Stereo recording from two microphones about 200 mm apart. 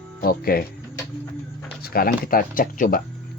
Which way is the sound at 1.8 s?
50° left (ahead or behind).